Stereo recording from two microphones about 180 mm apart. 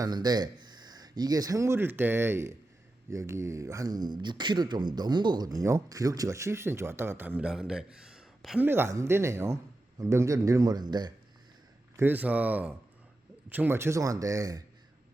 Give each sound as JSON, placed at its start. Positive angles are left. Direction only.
{"t": 0.0, "sound": "speech", "side_deg": -20}
{"t": 8.6, "sound": "a man's voice", "side_deg": -10}
{"t": 11.9, "sound": "speech", "side_deg": -10}